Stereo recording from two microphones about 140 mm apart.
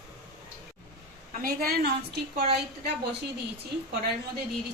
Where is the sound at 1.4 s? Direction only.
90° right.